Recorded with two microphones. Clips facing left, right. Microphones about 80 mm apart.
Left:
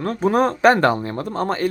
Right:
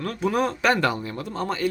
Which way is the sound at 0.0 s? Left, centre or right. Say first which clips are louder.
Left 6 dB; left.